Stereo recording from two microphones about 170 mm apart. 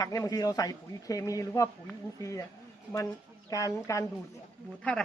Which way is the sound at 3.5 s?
20° left (ahead or behind).